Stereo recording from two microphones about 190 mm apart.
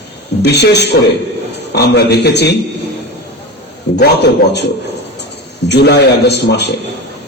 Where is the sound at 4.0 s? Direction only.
65° left (ahead or behind).